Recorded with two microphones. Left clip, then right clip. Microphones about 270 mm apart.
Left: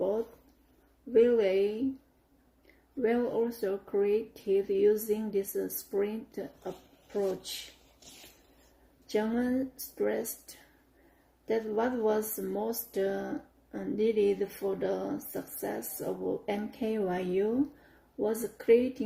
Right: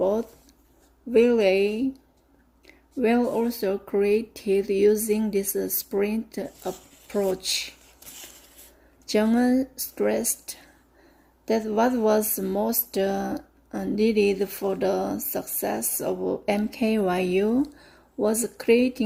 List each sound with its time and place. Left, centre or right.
1.1 s speech: right
3.0 s speech: right
9.1 s speech: right